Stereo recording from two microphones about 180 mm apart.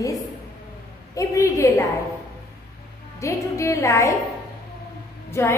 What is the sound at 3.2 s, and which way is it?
Speech, 15° left (ahead or behind).